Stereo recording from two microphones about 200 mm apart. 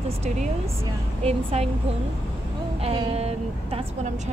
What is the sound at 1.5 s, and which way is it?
Speech, 30° right (ahead or behind).